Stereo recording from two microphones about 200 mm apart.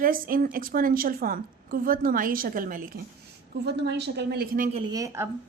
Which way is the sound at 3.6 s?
60° right (ahead or behind).